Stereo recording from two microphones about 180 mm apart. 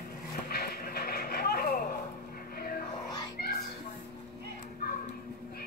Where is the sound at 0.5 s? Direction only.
60° left (ahead or behind).